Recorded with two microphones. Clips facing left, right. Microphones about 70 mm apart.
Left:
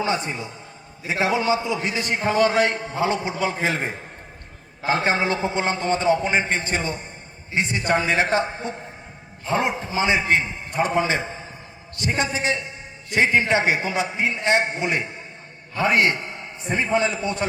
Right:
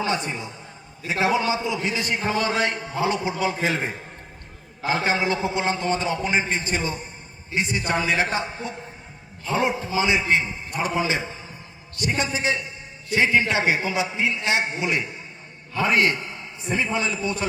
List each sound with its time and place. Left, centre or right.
0.0 s a man's voice: left
16.6 s a man's voice: left
17.2 s a man's voice: left